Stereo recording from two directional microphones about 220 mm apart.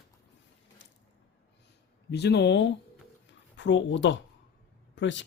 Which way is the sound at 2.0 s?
50° left (ahead or behind).